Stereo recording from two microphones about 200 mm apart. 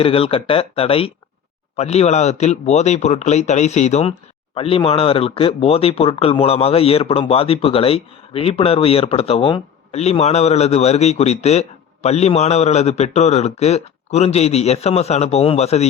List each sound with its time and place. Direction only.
0.0 s a man's voice: 30° left (ahead or behind)